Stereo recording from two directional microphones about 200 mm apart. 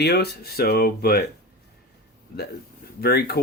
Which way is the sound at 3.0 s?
55° left (ahead or behind).